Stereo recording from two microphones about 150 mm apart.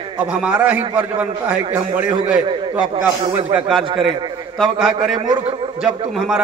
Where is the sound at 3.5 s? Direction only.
Centre (ahead or behind).